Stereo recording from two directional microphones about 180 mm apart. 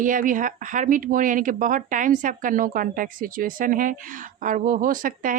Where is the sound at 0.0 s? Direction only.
45° right (ahead or behind).